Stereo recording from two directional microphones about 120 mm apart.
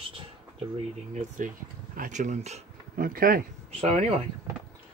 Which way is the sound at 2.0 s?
90° right.